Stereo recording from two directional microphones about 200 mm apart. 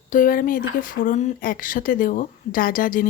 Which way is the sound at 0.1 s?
45° left (ahead or behind).